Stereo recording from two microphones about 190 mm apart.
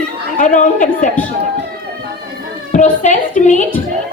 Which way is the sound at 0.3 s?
40° left (ahead or behind).